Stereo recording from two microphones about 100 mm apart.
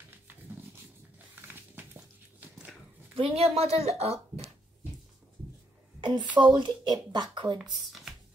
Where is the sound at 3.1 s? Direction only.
75° right (ahead or behind); by 4.2 s 90° right.